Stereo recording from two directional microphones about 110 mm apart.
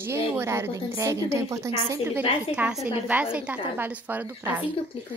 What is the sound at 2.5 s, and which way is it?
Speech, 10° right (ahead or behind).